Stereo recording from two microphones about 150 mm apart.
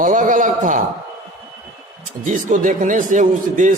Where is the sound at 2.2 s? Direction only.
60° right (ahead or behind).